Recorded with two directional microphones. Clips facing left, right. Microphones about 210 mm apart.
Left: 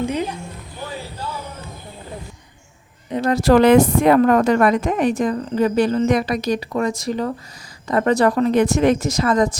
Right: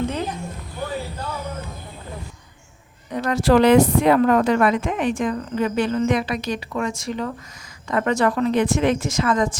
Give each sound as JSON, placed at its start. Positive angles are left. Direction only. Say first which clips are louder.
{"t": 0.0, "sound": "a sound", "louder": "left 2 dB", "side_deg": 10}
{"t": 3.1, "sound": "a woman's voice", "louder": "left 4 dB", "side_deg": 25}
{"t": 3.3, "sound": "speech", "louder": "left 2 dB", "side_deg": 45}